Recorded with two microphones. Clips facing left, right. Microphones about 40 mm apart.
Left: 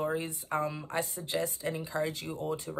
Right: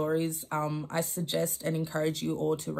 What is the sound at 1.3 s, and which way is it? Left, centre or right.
Speech, left.